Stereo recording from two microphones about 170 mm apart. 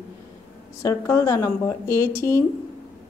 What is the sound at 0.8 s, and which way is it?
Speech, 20° left (ahead or behind).